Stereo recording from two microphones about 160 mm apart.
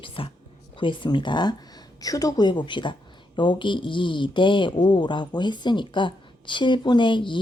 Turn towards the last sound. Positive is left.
turn(degrees=30)  # may be behind; listen again after turning